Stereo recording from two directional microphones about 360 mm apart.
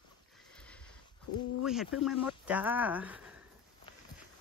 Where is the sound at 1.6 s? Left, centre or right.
Centre.